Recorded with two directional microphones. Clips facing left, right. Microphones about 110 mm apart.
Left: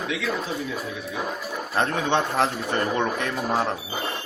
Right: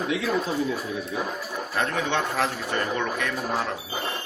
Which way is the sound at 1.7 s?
30° left (ahead or behind).